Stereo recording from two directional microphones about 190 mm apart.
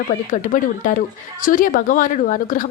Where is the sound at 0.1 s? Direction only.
45° left (ahead or behind).